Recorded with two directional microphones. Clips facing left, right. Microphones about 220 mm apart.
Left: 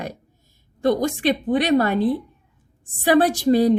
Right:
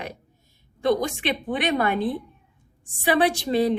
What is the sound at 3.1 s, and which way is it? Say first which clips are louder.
Speech: left 5 dB; 45° left (ahead or behind).